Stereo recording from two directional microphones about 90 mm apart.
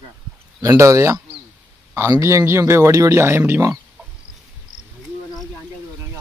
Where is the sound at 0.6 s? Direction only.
35° right (ahead or behind).